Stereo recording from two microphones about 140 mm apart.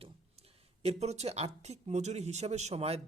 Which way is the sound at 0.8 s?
50° right (ahead or behind).